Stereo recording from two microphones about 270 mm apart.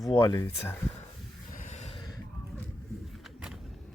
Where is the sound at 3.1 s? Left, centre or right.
Centre.